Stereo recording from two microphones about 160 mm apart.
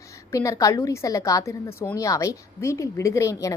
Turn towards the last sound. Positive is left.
turn(degrees=20)  # may be behind; listen again after turning